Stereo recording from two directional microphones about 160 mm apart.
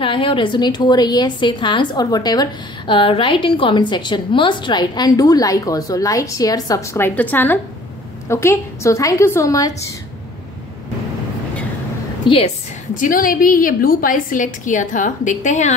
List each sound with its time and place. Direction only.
0.0 s a woman's voice: 35° left (ahead or behind)
12.2 s a woman's voice: 30° left (ahead or behind)
12.9 s a woman's voice: 55° left (ahead or behind)